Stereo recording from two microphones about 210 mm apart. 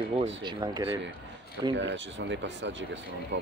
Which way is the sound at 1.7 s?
60° right (ahead or behind).